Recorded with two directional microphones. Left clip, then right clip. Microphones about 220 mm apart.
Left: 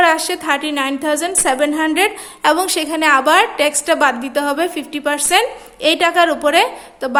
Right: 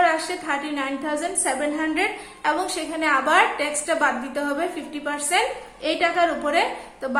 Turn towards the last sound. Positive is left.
turn(degrees=45)  # may be behind; listen again after turning